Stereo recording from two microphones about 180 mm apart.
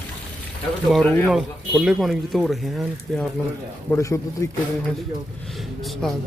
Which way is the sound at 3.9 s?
15° left (ahead or behind).